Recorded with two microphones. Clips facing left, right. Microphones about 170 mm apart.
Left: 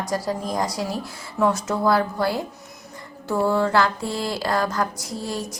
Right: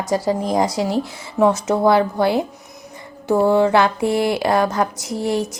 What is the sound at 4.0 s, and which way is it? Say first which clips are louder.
Speech: right 9 dB; 65° right (ahead or behind).